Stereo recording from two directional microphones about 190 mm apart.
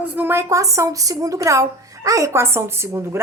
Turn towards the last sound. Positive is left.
turn(degrees=-15)  # may be behind; listen again after turning